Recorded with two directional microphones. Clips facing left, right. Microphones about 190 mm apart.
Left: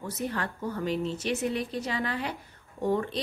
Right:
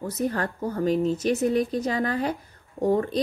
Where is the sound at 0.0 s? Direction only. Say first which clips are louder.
Right 6 dB; 40° right (ahead or behind).